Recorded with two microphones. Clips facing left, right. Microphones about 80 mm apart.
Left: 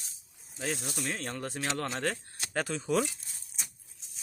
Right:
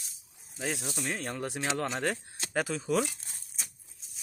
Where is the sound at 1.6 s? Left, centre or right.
Centre.